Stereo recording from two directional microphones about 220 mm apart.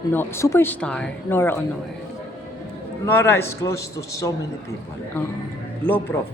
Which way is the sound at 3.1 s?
10° left (ahead or behind).